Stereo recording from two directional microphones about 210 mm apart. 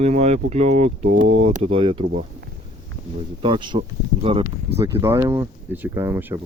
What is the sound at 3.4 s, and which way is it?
Speech, 25° right (ahead or behind).